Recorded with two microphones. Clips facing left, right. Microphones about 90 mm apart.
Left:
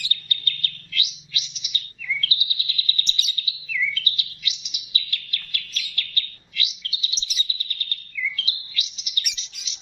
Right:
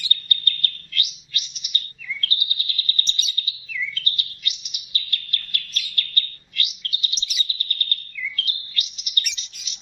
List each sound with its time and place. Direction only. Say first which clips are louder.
0.1 s bird: right 5 dB; 45° right (ahead or behind)
2.4 s bird: right 1 dB; 50° right (ahead or behind)
3.7 s chirp: left 3 dB; 40° right (ahead or behind)
9.3 s bird: right 1 dB; 50° right (ahead or behind)